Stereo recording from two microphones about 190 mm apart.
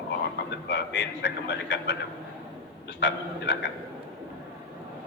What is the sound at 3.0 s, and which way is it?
Speech, 65° left (ahead or behind).